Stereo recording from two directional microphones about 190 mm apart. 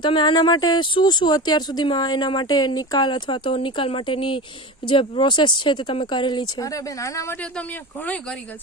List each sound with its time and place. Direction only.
0.0 s speech: 25° left (ahead or behind); by 8.4 s 5° left (ahead or behind)